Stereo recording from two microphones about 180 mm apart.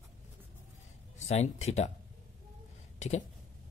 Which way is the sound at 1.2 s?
40° left (ahead or behind).